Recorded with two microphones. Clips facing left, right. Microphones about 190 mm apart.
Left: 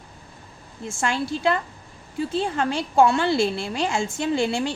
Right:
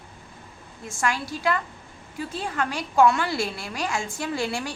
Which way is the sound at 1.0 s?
25° left (ahead or behind).